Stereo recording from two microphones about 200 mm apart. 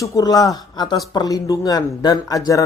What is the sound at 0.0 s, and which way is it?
Speech, 15° left (ahead or behind).